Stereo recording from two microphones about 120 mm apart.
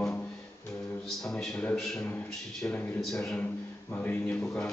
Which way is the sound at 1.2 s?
5° left (ahead or behind).